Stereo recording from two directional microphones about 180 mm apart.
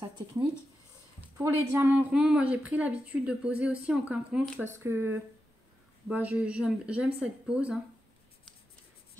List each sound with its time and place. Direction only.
1.4 s a woman's voice: 10° right (ahead or behind)